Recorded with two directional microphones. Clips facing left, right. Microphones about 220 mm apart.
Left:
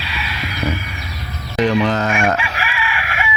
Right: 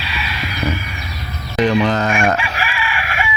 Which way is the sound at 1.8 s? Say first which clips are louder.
Right 1 dB; 5° left (ahead or behind).